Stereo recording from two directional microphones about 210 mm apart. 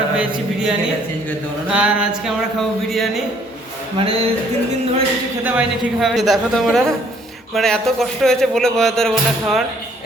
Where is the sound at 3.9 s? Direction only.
25° right (ahead or behind).